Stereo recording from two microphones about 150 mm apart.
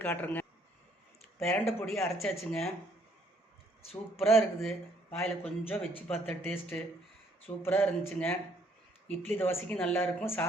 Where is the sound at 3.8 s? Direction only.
40° left (ahead or behind).